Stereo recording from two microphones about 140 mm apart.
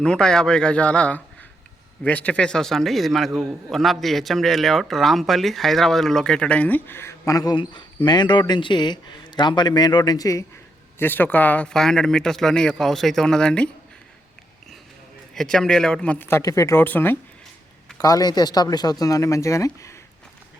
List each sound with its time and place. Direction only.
0.0 s a man's voice: 5° left (ahead or behind); by 10.4 s 25° left (ahead or behind)
11.0 s a man's voice: 15° left (ahead or behind)
15.4 s speech: 5° left (ahead or behind)
17.9 s speech: 25° left (ahead or behind)